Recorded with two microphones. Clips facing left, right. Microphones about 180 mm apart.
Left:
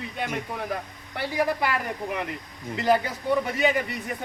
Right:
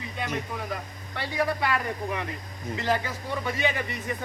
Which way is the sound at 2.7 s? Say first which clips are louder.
Left 5 dB; 60° left (ahead or behind).